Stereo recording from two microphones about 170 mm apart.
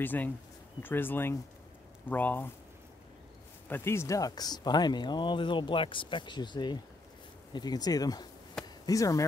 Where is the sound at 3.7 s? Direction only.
15° left (ahead or behind).